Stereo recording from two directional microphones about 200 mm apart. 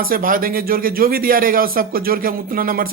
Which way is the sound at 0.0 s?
45° right (ahead or behind).